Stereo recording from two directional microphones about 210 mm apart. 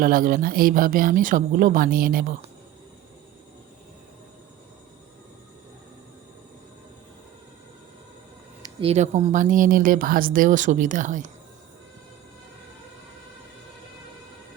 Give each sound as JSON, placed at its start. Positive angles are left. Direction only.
{"t": 0.0, "sound": "speech", "side_deg": -40}
{"t": 8.8, "sound": "speech", "side_deg": -30}